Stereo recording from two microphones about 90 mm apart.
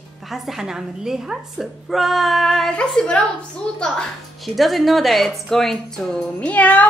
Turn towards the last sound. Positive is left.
turn(degrees=15)  # may be behind; listen again after turning